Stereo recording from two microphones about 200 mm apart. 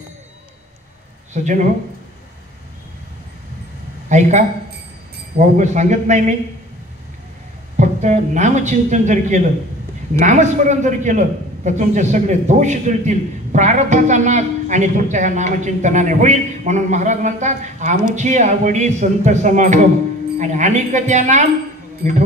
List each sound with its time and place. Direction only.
1.3 s a man's voice: 40° right (ahead or behind)
4.1 s a man's voice: 35° right (ahead or behind)
7.7 s a man's voice: 35° right (ahead or behind)